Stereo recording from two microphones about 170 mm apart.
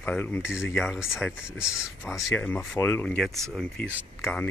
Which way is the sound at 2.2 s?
10° left (ahead or behind).